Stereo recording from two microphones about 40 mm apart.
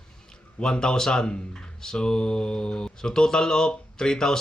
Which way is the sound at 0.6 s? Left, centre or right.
Centre.